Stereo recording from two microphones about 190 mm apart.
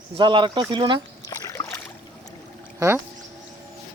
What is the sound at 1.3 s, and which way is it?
Rowboat, 15° left (ahead or behind).